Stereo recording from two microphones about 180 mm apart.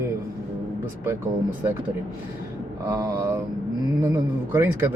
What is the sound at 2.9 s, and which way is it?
Speech, 15° right (ahead or behind).